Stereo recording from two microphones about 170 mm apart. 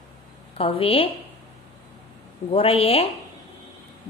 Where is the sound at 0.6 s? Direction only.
35° left (ahead or behind).